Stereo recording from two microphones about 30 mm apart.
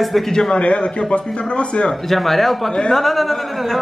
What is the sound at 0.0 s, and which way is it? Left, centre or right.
Speech, centre.